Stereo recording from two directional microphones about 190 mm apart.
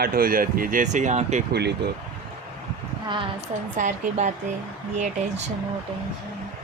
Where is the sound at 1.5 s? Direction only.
60° right (ahead or behind).